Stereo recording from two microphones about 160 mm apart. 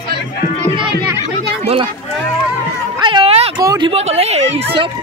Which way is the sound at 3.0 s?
35° right (ahead or behind).